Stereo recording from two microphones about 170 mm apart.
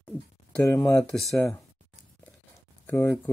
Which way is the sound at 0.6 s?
20° left (ahead or behind).